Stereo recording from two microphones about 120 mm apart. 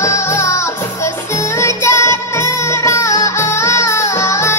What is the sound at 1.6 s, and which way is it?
Music, 20° left (ahead or behind).